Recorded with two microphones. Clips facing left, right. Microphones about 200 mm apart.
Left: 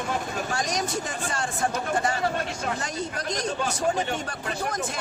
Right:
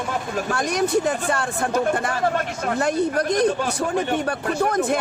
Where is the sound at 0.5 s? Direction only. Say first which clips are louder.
Right 10 dB; 60° right (ahead or behind).